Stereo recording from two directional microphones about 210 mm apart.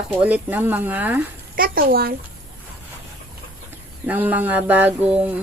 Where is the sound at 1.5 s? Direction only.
45° right (ahead or behind).